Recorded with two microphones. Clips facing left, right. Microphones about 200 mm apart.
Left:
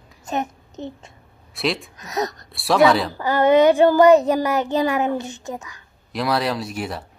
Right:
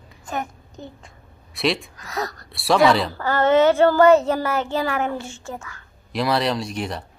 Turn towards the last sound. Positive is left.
turn(degrees=5)  # may be behind; listen again after turning